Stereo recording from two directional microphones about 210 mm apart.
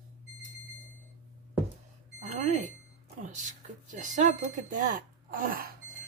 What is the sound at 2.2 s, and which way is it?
Smoke detector, 35° right (ahead or behind).